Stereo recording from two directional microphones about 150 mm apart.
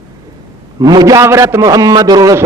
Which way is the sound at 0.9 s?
25° right (ahead or behind).